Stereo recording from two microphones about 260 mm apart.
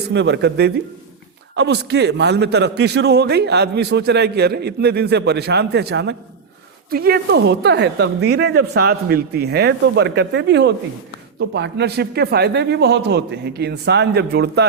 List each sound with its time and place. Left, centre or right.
0.1 s a man's voice: right